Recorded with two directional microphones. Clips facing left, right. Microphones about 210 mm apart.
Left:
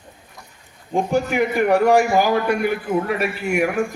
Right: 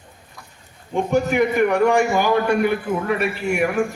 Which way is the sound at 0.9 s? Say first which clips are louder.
Right 1 dB; 35° left (ahead or behind).